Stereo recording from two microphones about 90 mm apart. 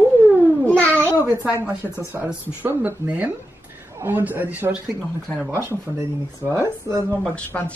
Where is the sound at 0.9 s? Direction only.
30° right (ahead or behind).